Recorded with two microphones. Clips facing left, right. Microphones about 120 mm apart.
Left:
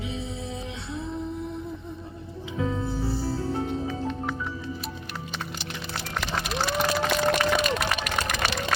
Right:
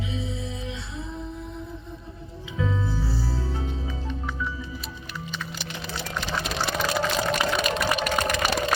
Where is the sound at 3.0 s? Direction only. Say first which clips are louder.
Left 3 dB; 60° left (ahead or behind).